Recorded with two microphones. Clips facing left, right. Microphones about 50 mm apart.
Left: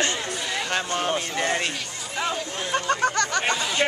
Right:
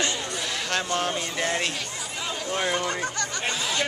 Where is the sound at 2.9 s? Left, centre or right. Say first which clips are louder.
Left 6 dB; left.